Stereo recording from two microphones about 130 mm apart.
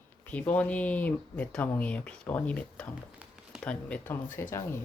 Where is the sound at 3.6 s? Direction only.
15° left (ahead or behind).